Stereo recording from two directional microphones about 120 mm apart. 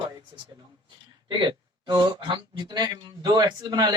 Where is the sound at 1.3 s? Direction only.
40° right (ahead or behind).